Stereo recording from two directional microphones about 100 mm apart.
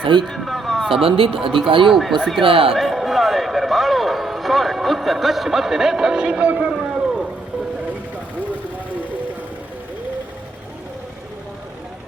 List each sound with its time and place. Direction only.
0.0 s speech: 55° right (ahead or behind)
0.3 s a sound: centre (ahead or behind)
1.0 s speech: 65° right (ahead or behind)
1.4 s speech: 5° right (ahead or behind)
1.6 s speech: 60° right (ahead or behind)
1.9 s speech: centre (ahead or behind)
2.4 s speech: 65° right (ahead or behind)
2.7 s a sound: centre (ahead or behind)